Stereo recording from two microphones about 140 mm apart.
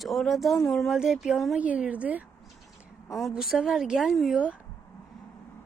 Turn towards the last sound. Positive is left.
turn(degrees=-5)  # may be behind; listen again after turning